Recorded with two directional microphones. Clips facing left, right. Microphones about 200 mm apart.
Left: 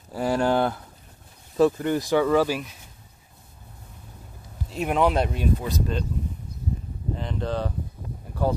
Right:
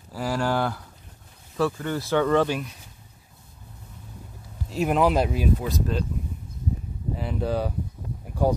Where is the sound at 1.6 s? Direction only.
20° left (ahead or behind).